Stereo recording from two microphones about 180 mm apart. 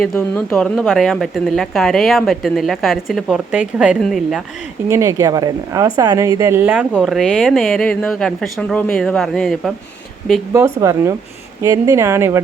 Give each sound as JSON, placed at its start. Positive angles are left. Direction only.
{"t": 0.0, "sound": "a woman's voice", "side_deg": 5}
{"t": 4.9, "sound": "a woman's voice", "side_deg": -15}
{"t": 10.5, "sound": "speech", "side_deg": -15}